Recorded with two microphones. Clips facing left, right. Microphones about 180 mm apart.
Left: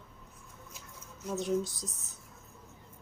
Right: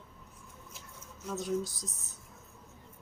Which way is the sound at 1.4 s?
25° left (ahead or behind).